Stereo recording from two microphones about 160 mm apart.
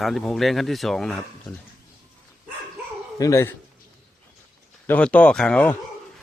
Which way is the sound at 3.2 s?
20° left (ahead or behind).